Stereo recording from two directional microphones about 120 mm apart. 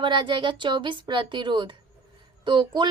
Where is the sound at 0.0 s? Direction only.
40° right (ahead or behind).